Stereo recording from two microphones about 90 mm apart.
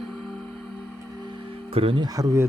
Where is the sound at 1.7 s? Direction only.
90° right.